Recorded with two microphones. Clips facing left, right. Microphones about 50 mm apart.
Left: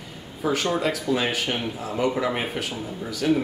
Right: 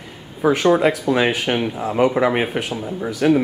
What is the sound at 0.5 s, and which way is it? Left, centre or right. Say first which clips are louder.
Speech: right 9 dB; right.